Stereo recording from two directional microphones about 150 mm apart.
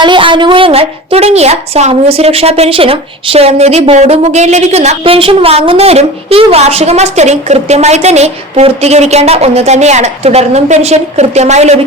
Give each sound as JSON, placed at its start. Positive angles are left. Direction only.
{"t": 0.0, "sound": "a woman's voice", "side_deg": -35}